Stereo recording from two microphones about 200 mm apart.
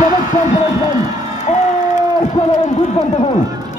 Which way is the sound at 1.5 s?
35° left (ahead or behind).